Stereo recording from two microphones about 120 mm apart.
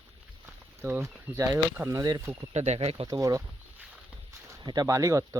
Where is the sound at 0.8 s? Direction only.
20° right (ahead or behind).